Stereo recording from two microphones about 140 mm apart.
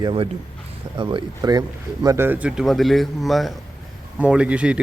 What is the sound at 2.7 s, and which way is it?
A man's voice, centre (ahead or behind).